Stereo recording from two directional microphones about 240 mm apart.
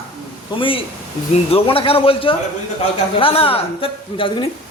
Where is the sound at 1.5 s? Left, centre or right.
Left.